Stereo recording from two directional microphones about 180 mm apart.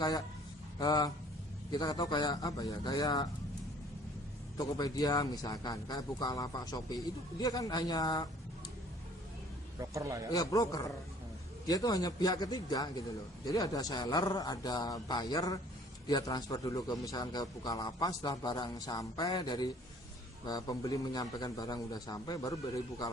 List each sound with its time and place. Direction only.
0.8 s a man's voice: 20° left (ahead or behind)
4.5 s a man's voice: 20° left (ahead or behind)
9.9 s a man's voice: 20° right (ahead or behind)
10.3 s a man's voice: 20° left (ahead or behind)